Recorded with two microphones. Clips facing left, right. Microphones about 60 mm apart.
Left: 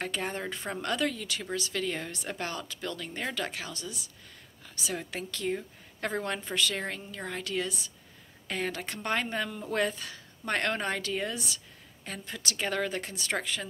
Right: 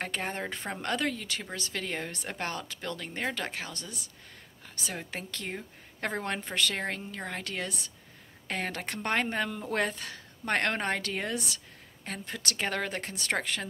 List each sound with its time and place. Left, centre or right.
0.0 s a woman's voice: right